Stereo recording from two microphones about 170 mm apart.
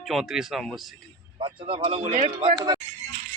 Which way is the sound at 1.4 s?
30° right (ahead or behind).